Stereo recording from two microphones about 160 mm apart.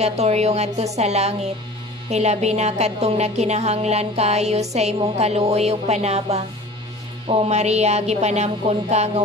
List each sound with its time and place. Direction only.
0.0 s a woman's voice: 40° right (ahead or behind)